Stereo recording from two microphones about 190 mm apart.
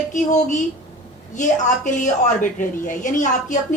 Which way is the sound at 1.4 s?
40° left (ahead or behind).